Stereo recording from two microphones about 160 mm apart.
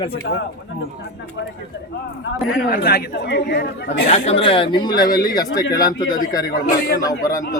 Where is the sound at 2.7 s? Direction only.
90° left.